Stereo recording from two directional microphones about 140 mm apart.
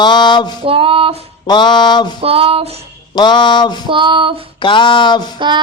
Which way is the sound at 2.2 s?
45° right (ahead or behind).